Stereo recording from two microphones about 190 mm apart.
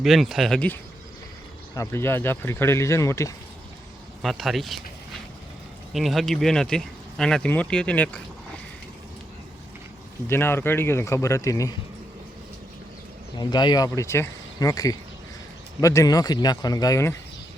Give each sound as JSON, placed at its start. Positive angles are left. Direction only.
{"t": 0.0, "sound": "speech", "side_deg": 0}
{"t": 4.2, "sound": "speech", "side_deg": 0}
{"t": 5.9, "sound": "speech", "side_deg": 0}
{"t": 10.2, "sound": "speech", "side_deg": 10}
{"t": 13.3, "sound": "speech", "side_deg": 20}